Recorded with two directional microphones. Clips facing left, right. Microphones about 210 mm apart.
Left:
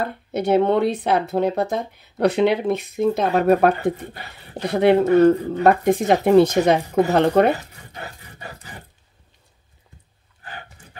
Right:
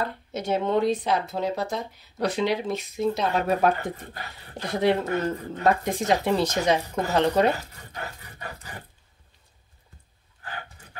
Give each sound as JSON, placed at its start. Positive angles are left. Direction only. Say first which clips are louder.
{"t": 0.0, "sound": "speech", "louder": "left 6 dB", "side_deg": 60}
{"t": 7.5, "sound": "speech", "louder": "left 2 dB", "side_deg": 25}